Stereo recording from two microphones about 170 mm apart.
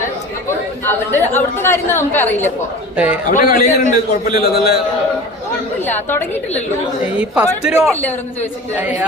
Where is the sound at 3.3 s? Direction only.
50° left (ahead or behind).